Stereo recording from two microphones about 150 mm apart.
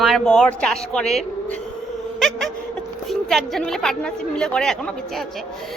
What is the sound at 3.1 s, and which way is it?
A woman's voice, centre (ahead or behind).